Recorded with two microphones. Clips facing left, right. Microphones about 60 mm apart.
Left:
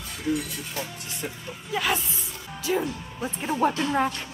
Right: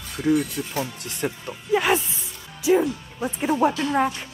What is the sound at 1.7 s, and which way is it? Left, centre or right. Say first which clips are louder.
Speech: right 6 dB; right.